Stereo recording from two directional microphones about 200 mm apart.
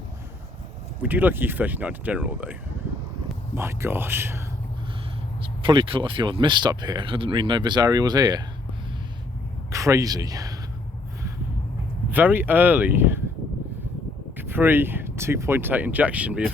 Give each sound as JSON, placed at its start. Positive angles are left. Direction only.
{"t": 1.0, "sound": "speech", "side_deg": -10}
{"t": 5.4, "sound": "speech", "side_deg": -25}
{"t": 9.7, "sound": "speech", "side_deg": -15}
{"t": 12.1, "sound": "speech", "side_deg": -10}
{"t": 14.3, "sound": "speech", "side_deg": -10}